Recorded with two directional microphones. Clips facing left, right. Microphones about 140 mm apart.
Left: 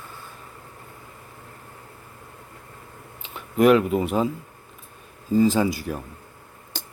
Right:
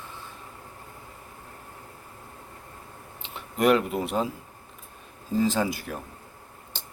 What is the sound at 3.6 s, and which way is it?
Speech, centre (ahead or behind).